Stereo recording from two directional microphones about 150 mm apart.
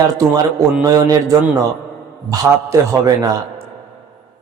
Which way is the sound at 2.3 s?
25° right (ahead or behind).